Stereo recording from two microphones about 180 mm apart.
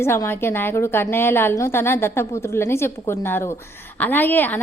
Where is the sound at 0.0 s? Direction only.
15° left (ahead or behind).